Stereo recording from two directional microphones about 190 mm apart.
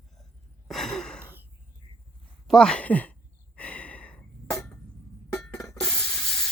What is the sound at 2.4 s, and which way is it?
Speech, 5° left (ahead or behind).